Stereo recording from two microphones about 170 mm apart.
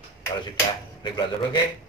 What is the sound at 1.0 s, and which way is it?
Speech, 25° left (ahead or behind).